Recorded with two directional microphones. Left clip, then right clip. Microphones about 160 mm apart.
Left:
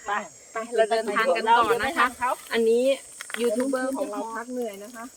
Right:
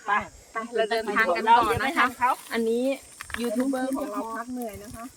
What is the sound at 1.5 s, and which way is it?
Speech, 30° left (ahead or behind).